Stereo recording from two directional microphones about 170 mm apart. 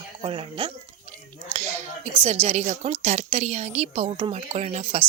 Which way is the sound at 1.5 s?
40° right (ahead or behind).